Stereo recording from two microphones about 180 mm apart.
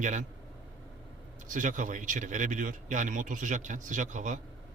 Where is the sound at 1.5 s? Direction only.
45° right (ahead or behind).